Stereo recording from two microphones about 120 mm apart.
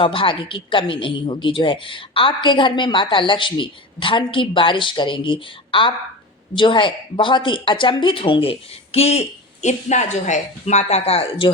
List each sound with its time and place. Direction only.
0.0 s a woman's voice: 45° left (ahead or behind)